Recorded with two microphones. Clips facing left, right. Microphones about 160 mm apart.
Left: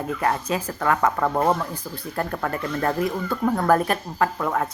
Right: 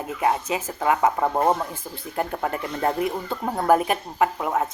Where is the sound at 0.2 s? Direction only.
15° right (ahead or behind).